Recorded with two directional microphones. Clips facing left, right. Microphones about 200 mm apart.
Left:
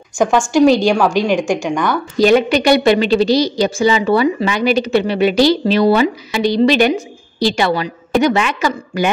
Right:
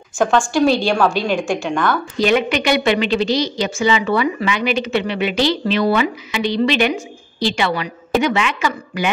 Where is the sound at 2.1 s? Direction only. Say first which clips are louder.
Left 7 dB; 40° left (ahead or behind).